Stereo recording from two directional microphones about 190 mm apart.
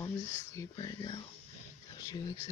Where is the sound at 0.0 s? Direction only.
15° left (ahead or behind).